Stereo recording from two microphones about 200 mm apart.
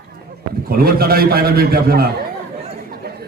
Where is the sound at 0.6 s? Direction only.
50° right (ahead or behind).